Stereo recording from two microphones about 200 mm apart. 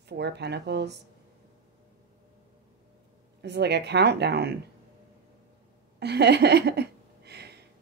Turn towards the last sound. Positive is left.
turn(degrees=-55)  # may be behind; listen again after turning